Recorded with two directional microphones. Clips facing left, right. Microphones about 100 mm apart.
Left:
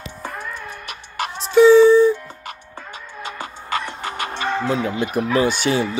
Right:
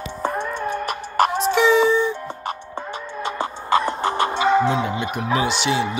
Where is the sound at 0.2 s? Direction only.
35° right (ahead or behind).